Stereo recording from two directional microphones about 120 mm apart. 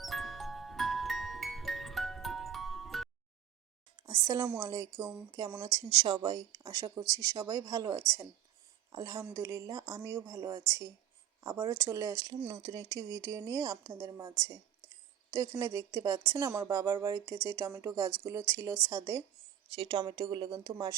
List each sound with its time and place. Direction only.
0.0 s music: centre (ahead or behind)
4.0 s speech: 25° right (ahead or behind)
19.7 s speech: 35° right (ahead or behind)